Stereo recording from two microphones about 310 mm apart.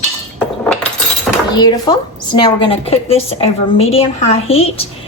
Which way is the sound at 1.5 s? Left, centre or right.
Centre.